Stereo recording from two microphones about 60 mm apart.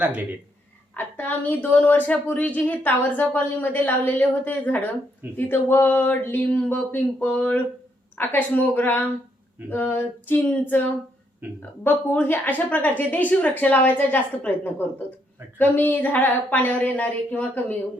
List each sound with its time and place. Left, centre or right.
0.0 s speech: right
0.9 s a woman's voice: left
11.4 s a woman's voice: right
11.8 s a woman's voice: left